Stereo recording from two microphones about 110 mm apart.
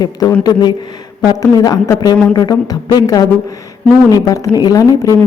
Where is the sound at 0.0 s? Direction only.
35° left (ahead or behind).